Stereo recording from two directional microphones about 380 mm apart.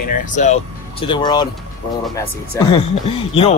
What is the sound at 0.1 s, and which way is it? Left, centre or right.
Speech, centre.